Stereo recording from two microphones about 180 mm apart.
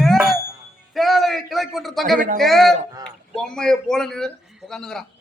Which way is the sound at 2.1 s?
50° right (ahead or behind).